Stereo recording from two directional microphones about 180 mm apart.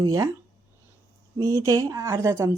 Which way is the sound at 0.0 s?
20° right (ahead or behind).